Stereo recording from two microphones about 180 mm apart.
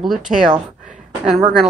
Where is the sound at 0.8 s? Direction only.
45° right (ahead or behind).